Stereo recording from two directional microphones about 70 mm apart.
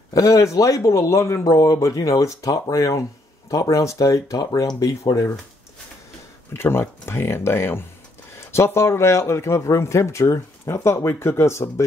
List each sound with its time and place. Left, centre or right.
0.1 s speech: left
1.4 s speech: left
4.7 s speech: left
6.5 s speech: left